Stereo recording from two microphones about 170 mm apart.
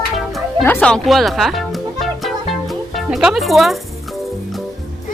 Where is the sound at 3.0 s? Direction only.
Centre (ahead or behind).